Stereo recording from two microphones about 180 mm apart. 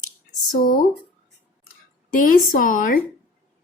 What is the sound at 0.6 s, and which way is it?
Speech, 50° left (ahead or behind).